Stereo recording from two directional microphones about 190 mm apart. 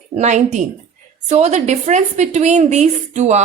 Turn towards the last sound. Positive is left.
turn(degrees=-35)  # may be behind; listen again after turning